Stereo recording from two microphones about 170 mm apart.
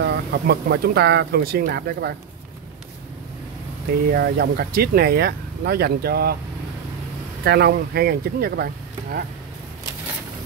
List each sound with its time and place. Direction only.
0.0 s speech: 75° right (ahead or behind)
4.1 s speech: 65° right (ahead or behind)
7.4 s speech: 70° right (ahead or behind)